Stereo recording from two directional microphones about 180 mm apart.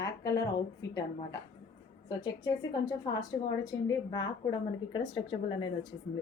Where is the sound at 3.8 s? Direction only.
20° left (ahead or behind).